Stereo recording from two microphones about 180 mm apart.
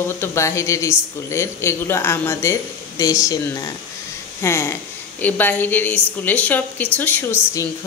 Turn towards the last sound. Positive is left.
turn(degrees=15)  # may be behind; listen again after turning